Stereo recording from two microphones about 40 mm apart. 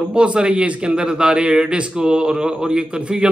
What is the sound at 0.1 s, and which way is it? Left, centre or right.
A man's voice, right.